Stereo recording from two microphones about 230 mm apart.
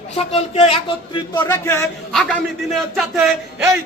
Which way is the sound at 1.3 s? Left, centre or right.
Centre.